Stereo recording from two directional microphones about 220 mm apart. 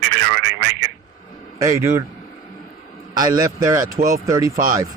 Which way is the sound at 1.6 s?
15° right (ahead or behind).